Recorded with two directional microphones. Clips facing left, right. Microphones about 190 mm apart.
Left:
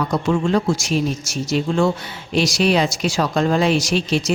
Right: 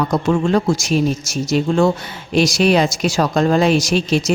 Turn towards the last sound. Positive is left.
turn(degrees=-45)  # may be behind; listen again after turning